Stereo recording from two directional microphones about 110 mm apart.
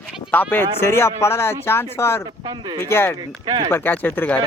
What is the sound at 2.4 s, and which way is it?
Speech, 40° right (ahead or behind).